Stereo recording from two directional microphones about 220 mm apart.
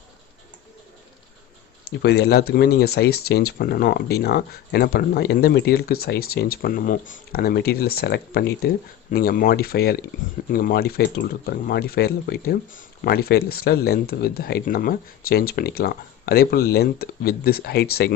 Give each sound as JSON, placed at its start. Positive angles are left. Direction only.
{"t": 2.0, "sound": "speech", "side_deg": 45}